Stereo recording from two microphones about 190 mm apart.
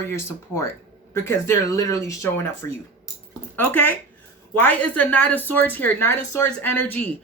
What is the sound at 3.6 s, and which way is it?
Speech, 10° left (ahead or behind).